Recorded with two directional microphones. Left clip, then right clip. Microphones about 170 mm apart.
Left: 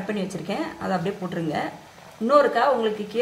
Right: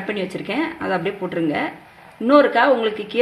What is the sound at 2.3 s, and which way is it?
Speech, 45° right (ahead or behind).